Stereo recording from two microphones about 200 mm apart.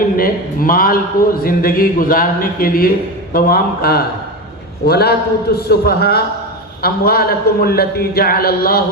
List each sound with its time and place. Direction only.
0.2 s a man's voice: 45° left (ahead or behind)